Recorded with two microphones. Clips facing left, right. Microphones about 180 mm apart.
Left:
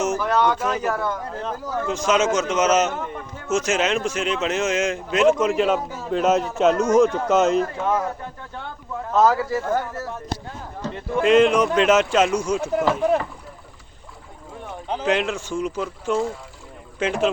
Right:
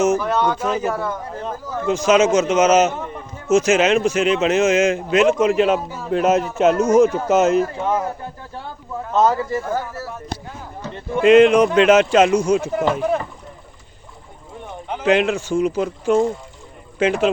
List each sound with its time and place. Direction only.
0.2 s a man's voice: centre (ahead or behind)
2.3 s speech: 20° right (ahead or behind)
2.6 s a man's voice: centre (ahead or behind)
7.9 s speech: 30° right (ahead or behind)
9.3 s a man's voice: centre (ahead or behind)
14.6 s a sound: centre (ahead or behind)
15.4 s a man's voice: centre (ahead or behind)